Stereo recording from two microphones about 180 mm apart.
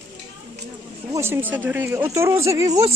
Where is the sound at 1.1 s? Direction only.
15° right (ahead or behind).